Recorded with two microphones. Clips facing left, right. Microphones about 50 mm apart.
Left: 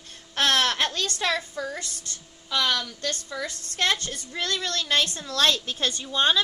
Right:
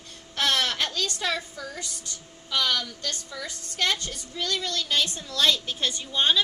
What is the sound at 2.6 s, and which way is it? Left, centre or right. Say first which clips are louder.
A woman's voice: left 1 dB; left.